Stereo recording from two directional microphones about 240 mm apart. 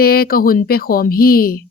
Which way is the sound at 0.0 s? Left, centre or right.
Left.